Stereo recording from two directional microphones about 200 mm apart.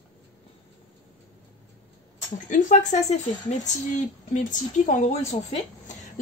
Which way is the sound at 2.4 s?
40° left (ahead or behind).